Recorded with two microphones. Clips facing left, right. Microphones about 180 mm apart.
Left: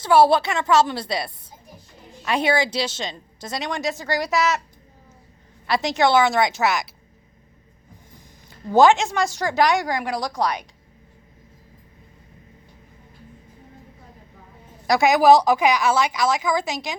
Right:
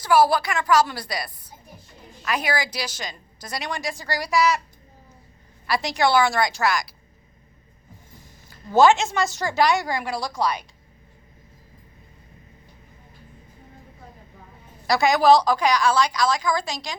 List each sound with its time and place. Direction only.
0.0 s a woman's voice: 25° left (ahead or behind)
5.6 s a woman's voice: 20° left (ahead or behind)
8.4 s speech: 15° left (ahead or behind)
14.8 s a woman's voice: 15° left (ahead or behind)